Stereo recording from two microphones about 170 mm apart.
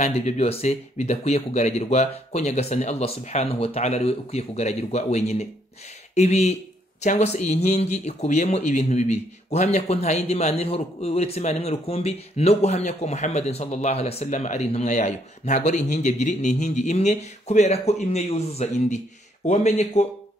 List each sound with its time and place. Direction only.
0.0 s speech: 45° left (ahead or behind)